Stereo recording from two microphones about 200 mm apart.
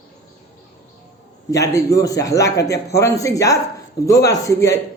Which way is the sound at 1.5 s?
15° left (ahead or behind).